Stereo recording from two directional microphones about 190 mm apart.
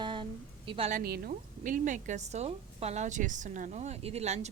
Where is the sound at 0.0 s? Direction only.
25° right (ahead or behind).